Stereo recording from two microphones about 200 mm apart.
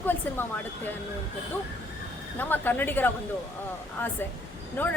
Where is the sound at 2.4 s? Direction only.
10° left (ahead or behind).